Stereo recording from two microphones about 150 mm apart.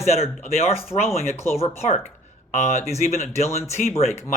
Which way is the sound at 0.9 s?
25° left (ahead or behind).